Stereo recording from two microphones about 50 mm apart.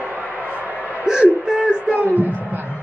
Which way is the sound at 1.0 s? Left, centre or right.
Centre.